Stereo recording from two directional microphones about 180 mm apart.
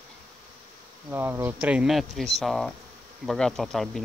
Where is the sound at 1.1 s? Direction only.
15° right (ahead or behind).